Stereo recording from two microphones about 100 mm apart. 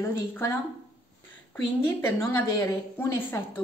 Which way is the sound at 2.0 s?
25° left (ahead or behind).